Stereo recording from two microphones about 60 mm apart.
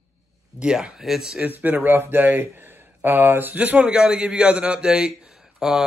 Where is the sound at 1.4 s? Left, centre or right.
Right.